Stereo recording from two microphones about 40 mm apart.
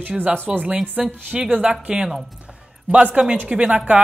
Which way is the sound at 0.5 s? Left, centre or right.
Centre.